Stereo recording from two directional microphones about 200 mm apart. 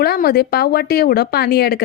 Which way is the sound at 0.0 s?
50° left (ahead or behind).